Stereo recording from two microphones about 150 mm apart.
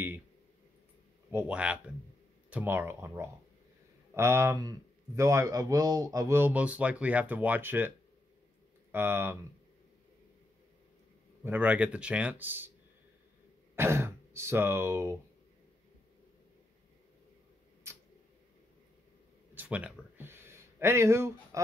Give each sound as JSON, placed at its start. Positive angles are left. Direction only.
{"t": 1.3, "sound": "speech", "side_deg": -5}
{"t": 8.9, "sound": "speech", "side_deg": -15}
{"t": 11.4, "sound": "speech", "side_deg": -10}
{"t": 13.7, "sound": "speech", "side_deg": -15}
{"t": 17.9, "sound": "a sound", "side_deg": -20}
{"t": 19.5, "sound": "a sound", "side_deg": -10}